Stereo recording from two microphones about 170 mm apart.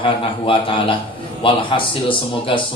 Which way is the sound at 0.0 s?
30° left (ahead or behind).